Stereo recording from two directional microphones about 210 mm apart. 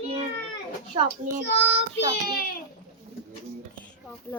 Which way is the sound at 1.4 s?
60° left (ahead or behind).